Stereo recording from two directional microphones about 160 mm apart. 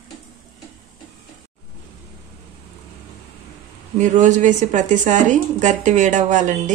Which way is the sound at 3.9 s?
50° right (ahead or behind).